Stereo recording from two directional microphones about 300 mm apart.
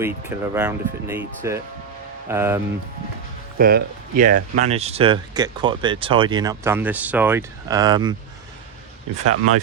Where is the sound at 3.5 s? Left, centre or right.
Right; by 8.1 s centre.